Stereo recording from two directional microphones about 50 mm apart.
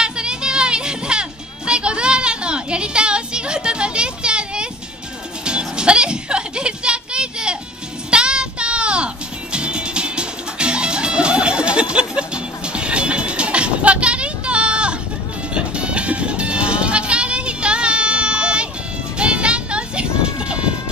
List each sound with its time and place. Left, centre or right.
0.0 s music: centre
1.7 s child singing: right
5.4 s music: centre